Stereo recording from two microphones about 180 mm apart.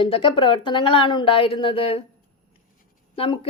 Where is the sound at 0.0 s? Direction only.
30° left (ahead or behind).